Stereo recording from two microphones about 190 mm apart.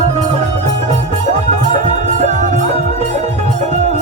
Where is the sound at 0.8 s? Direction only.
40° right (ahead or behind).